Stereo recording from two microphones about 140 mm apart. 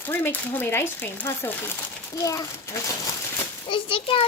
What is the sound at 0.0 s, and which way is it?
A woman's voice, 15° left (ahead or behind).